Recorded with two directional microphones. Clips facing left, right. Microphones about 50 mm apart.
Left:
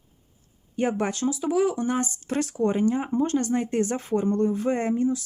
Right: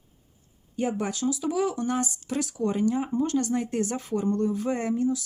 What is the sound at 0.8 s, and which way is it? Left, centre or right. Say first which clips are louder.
Speech: left 3 dB; left.